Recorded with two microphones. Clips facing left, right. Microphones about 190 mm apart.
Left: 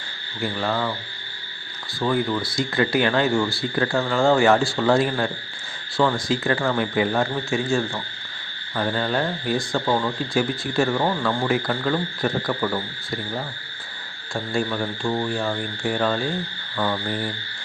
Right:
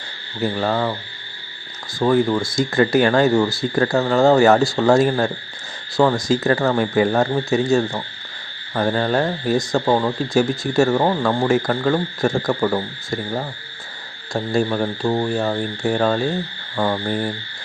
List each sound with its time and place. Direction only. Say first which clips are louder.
0.4 s speech: right 4 dB; 40° right (ahead or behind)
2.0 s speech: right 6 dB; 45° right (ahead or behind)